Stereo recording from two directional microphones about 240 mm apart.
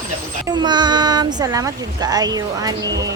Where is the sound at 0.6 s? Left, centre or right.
Centre.